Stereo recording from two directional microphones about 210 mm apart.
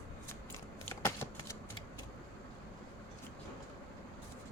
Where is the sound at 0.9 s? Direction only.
15° left (ahead or behind).